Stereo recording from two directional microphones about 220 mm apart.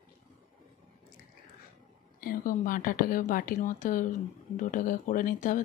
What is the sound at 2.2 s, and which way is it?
Speech, 40° left (ahead or behind).